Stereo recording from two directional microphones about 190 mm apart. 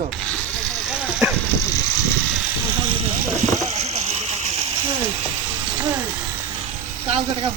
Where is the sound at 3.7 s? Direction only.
35° right (ahead or behind).